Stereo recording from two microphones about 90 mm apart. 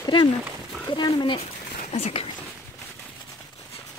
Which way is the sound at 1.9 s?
90° left.